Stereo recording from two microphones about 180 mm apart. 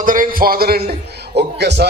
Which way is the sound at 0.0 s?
50° right (ahead or behind).